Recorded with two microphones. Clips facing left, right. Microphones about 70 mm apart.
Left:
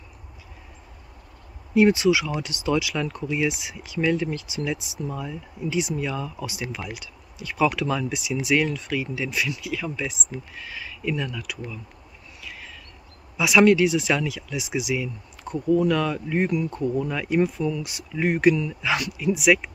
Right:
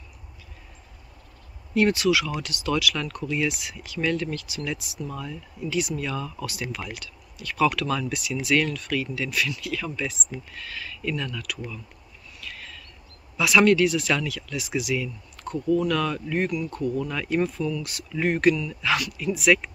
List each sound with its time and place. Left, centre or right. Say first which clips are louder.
1.7 s speech: left 3 dB; centre
12.4 s a sound: even; centre
13.4 s speech: left 2 dB; centre